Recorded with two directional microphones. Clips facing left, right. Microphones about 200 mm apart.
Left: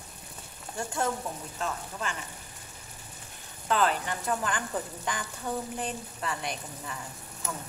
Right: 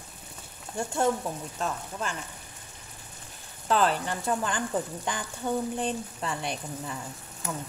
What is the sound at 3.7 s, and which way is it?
Speech, 35° right (ahead or behind).